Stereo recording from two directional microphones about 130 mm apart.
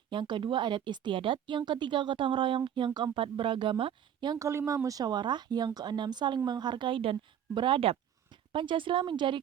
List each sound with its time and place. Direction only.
0.1 s speech: 40° right (ahead or behind)
4.4 s speech: 25° right (ahead or behind); by 9.4 s 40° right (ahead or behind)